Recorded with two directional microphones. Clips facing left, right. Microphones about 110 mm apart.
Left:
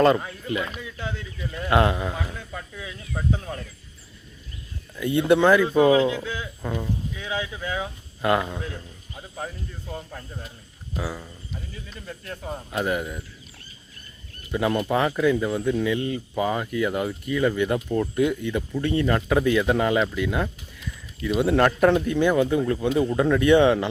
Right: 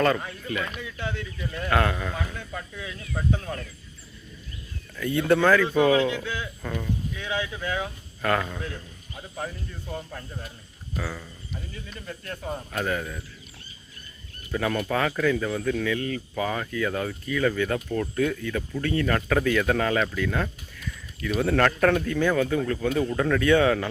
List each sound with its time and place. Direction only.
0.4 s speech: 20° left (ahead or behind)
4.9 s speech: 15° left (ahead or behind)
12.7 s speech: 15° left (ahead or behind)
14.5 s speech: 15° left (ahead or behind)